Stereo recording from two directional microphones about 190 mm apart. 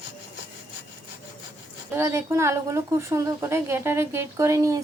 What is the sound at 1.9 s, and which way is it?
A woman's voice, 15° right (ahead or behind).